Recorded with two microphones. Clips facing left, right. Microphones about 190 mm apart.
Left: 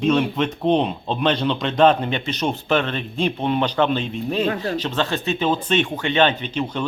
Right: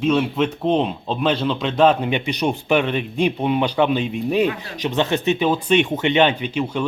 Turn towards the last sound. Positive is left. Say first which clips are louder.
# right 2 dB
turn(degrees=-10)  # may be behind; listen again after turning